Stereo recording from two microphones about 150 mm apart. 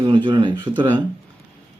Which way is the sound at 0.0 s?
30° right (ahead or behind).